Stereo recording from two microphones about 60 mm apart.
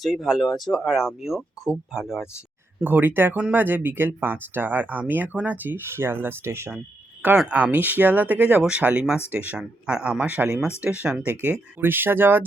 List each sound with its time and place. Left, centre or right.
0.0 s speech: centre
2.8 s speech: right
5.9 s speech: right
6.7 s a sound: right
7.5 s speech: right
9.6 s speech: centre
10.2 s speech: right
11.0 s speech: centre
11.3 s speech: right